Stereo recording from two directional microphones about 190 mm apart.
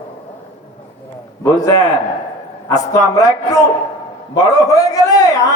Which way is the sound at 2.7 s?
20° left (ahead or behind).